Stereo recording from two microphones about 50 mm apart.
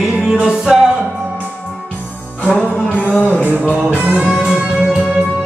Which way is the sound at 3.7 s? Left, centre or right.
Right.